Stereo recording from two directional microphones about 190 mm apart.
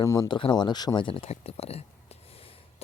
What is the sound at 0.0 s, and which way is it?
A man's voice, 20° left (ahead or behind).